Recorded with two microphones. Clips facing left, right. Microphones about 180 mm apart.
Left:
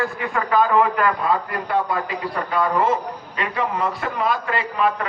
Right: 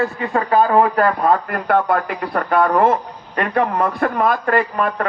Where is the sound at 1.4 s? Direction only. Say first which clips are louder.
Right 5 dB; 60° right (ahead or behind).